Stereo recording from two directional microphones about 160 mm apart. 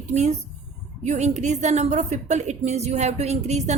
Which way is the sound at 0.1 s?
45° right (ahead or behind).